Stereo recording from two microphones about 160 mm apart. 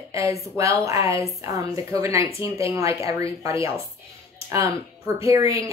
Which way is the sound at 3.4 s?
20° right (ahead or behind).